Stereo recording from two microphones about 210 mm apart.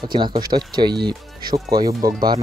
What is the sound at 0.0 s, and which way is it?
Speech, 20° right (ahead or behind).